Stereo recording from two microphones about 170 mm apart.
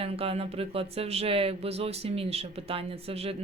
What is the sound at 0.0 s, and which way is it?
Speech, 35° right (ahead or behind).